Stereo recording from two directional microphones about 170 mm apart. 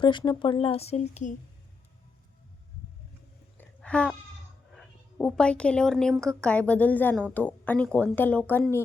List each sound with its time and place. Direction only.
0.0 s speech: 25° left (ahead or behind); by 1.3 s 45° left (ahead or behind)
3.6 s a sound: 5° left (ahead or behind)
4.8 s a woman's voice: 5° left (ahead or behind)